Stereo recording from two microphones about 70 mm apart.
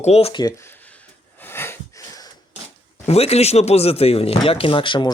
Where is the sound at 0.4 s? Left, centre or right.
Left.